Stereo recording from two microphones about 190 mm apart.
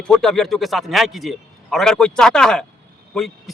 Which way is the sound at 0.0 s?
5° left (ahead or behind).